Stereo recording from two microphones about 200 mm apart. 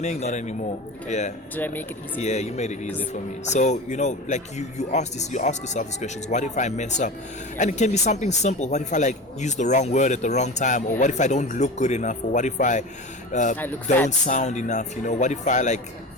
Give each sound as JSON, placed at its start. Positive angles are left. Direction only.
{"t": 0.0, "sound": "speech", "side_deg": 35}
{"t": 1.5, "sound": "speech", "side_deg": 10}
{"t": 2.1, "sound": "speech", "side_deg": 35}